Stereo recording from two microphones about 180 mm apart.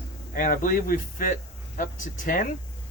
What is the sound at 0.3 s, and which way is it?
Speech, 50° left (ahead or behind).